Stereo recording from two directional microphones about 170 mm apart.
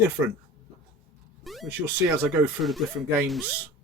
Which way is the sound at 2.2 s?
5° right (ahead or behind).